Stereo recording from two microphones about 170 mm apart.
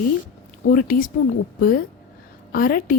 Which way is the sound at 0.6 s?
55° left (ahead or behind).